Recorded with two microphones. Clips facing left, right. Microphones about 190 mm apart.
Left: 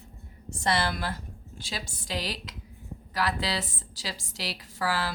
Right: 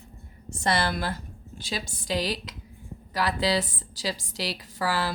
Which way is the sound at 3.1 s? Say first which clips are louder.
Right 4 dB; 20° right (ahead or behind).